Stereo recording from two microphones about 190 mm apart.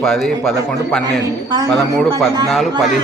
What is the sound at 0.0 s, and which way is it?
Speech, centre (ahead or behind).